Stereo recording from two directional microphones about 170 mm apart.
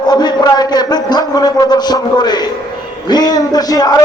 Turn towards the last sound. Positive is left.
turn(degrees=20)  # may be behind; listen again after turning